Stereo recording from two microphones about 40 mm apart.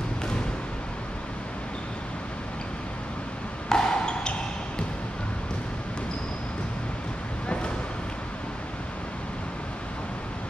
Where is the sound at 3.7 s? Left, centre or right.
Centre.